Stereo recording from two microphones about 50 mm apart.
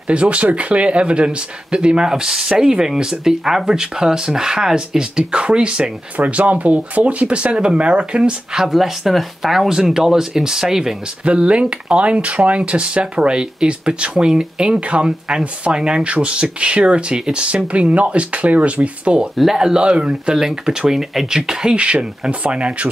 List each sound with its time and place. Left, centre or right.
0.1 s speech: right; by 11.0 s centre
11.2 s speech: right
19.3 s speech: centre; by 22.8 s right